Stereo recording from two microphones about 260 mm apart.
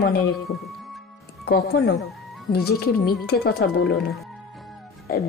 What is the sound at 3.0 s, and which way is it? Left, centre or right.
Speech, left.